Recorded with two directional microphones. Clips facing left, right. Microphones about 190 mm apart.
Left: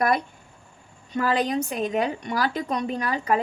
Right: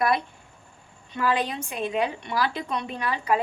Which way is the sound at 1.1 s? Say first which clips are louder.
Left 3 dB; 40° left (ahead or behind).